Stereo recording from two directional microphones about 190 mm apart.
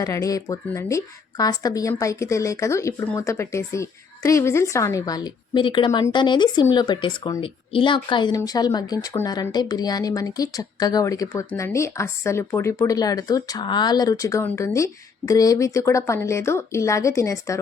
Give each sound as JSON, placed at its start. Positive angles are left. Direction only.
{"t": 0.0, "sound": "a woman's voice", "side_deg": 15}